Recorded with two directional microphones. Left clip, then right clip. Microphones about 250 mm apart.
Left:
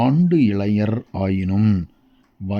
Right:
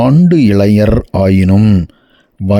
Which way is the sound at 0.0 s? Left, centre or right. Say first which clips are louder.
Right 8 dB; right.